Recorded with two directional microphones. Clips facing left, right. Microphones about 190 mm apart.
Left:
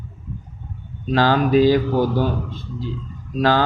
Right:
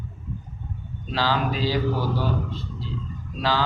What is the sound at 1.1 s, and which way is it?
Speech, 50° left (ahead or behind).